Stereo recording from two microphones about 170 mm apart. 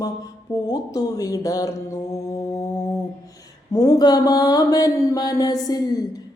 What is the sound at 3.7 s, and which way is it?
A woman's voice, 20° left (ahead or behind).